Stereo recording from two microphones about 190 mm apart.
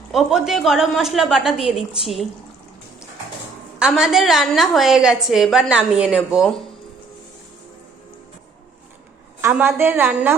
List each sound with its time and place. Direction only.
0.1 s a woman's voice: centre (ahead or behind)
3.8 s a woman's voice: 5° right (ahead or behind)
9.4 s a woman's voice: 10° right (ahead or behind)